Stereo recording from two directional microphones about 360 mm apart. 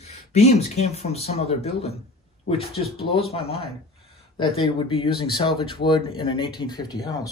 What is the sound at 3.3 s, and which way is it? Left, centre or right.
Speech, centre.